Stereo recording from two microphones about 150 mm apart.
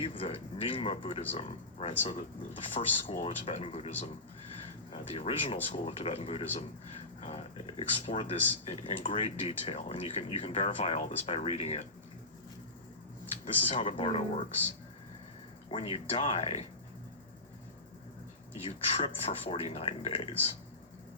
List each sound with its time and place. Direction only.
0.0 s speech: 35° left (ahead or behind)
13.4 s speech: 40° left (ahead or behind)
15.7 s speech: 40° left (ahead or behind)
18.5 s speech: 40° left (ahead or behind)